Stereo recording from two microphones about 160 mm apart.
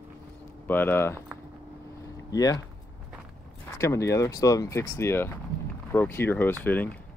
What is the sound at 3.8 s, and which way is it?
Speech, 20° left (ahead or behind).